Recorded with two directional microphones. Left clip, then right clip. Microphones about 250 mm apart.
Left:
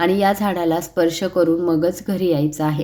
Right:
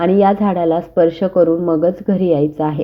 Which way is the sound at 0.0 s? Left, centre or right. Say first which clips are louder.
Right 4 dB; centre.